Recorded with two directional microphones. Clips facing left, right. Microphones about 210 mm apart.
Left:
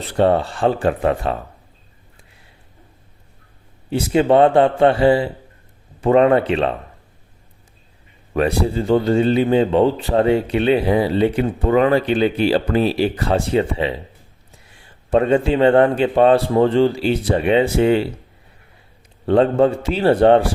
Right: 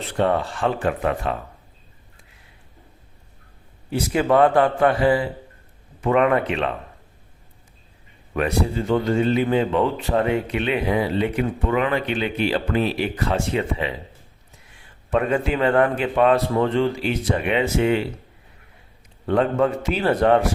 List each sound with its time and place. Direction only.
0.1 s speech: 30° left (ahead or behind)
3.8 s a man's voice: 25° left (ahead or behind)
8.3 s speech: 35° left (ahead or behind)
15.1 s speech: 30° left (ahead or behind)
19.2 s speech: 30° left (ahead or behind)